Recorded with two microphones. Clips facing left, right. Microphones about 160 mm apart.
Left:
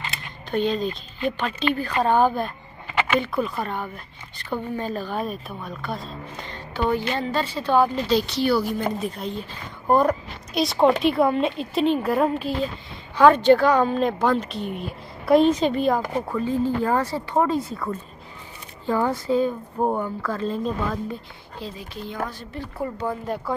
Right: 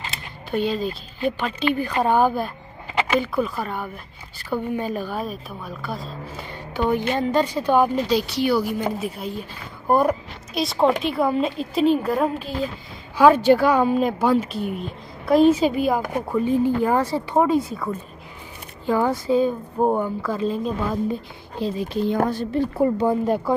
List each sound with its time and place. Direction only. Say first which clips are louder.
0.5 s a woman's voice: even; 5° right (ahead or behind)
18.9 s speech: right 2 dB; 10° right (ahead or behind)